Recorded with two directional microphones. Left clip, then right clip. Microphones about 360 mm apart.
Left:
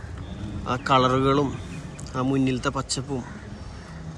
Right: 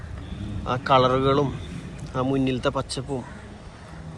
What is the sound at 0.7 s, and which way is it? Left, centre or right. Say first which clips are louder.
Speech: right 1 dB; centre.